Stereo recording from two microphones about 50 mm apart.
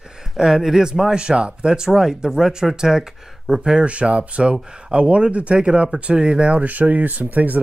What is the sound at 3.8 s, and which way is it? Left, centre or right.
Speech, right.